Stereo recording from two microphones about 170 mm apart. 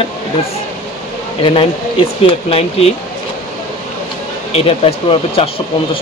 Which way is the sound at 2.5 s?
35° left (ahead or behind).